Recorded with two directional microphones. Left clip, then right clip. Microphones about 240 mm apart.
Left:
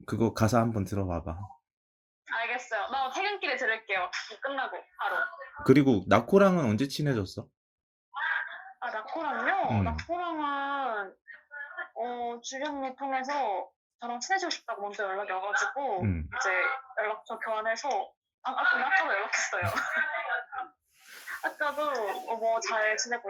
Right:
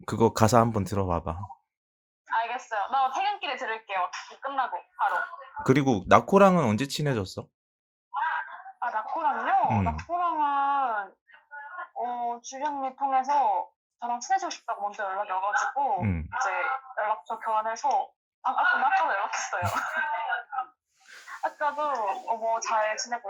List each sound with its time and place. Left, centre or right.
0.0 s speech: right
2.2 s a sound: centre
5.6 s speech: right
8.1 s a sound: centre
11.8 s speech: centre
16.0 s speech: right
16.3 s speech: centre
21.2 s a sound: centre
21.8 s speech: centre